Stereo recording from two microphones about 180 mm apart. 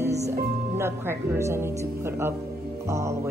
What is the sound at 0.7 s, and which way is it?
Speech, 15° right (ahead or behind).